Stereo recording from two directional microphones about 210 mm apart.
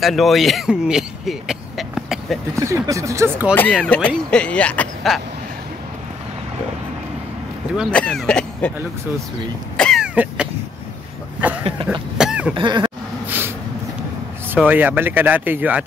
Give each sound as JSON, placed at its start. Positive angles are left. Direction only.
{"t": 0.0, "sound": "speech", "side_deg": 0}
{"t": 2.5, "sound": "speech", "side_deg": -15}
{"t": 3.7, "sound": "speech", "side_deg": 5}
{"t": 7.7, "sound": "speech", "side_deg": 0}
{"t": 9.8, "sound": "cough", "side_deg": 0}
{"t": 11.9, "sound": "cough", "side_deg": -5}
{"t": 12.5, "sound": "speech", "side_deg": -20}
{"t": 14.5, "sound": "speech", "side_deg": -5}